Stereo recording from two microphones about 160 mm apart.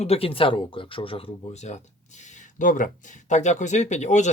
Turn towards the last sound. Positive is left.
turn(degrees=50)  # may be behind; listen again after turning